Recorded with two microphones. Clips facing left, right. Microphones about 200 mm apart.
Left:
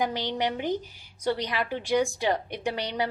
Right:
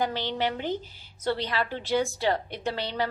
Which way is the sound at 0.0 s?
15° left (ahead or behind).